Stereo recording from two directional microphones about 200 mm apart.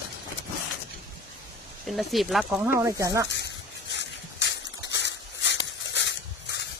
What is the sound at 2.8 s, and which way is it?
Speech, 15° right (ahead or behind).